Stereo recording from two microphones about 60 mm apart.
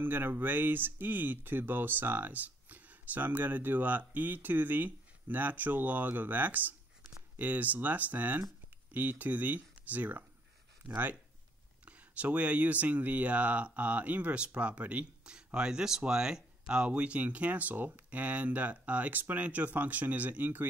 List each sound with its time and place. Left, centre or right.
0.0 s speech: right
11.8 s speech: right